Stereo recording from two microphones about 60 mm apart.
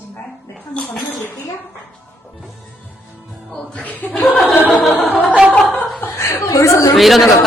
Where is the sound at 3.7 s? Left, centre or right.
Left.